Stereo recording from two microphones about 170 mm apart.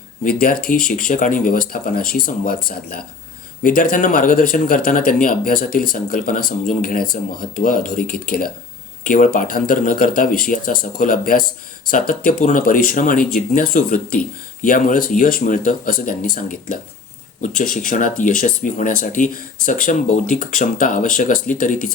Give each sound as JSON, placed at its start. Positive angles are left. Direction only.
{"t": 0.3, "sound": "speech", "side_deg": 55}